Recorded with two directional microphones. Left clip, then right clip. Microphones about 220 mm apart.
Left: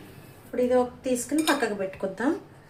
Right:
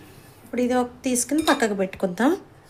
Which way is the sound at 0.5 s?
50° right (ahead or behind).